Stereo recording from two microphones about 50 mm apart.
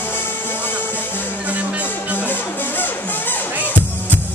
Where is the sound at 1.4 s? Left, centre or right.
Right.